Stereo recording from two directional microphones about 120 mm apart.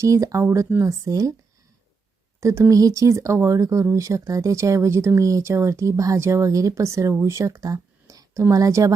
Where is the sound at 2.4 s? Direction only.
25° right (ahead or behind).